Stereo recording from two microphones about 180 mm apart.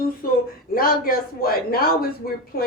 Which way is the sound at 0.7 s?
55° left (ahead or behind).